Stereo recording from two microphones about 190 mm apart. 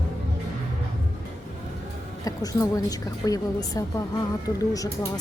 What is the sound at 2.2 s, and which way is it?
A woman's voice, 20° left (ahead or behind).